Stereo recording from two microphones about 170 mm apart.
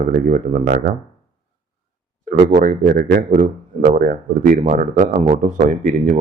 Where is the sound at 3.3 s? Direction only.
50° right (ahead or behind).